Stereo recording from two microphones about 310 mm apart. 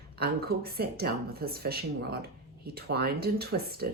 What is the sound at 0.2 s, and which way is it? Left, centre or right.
Speech, right.